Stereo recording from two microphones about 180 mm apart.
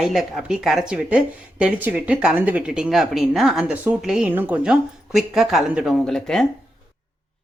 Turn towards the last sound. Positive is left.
turn(degrees=0)  # may be behind; listen again after turning